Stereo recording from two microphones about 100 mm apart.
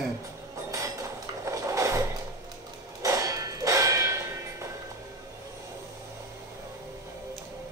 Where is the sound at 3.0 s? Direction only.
30° right (ahead or behind).